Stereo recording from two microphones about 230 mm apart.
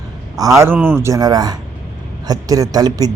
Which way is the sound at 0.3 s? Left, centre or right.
Centre.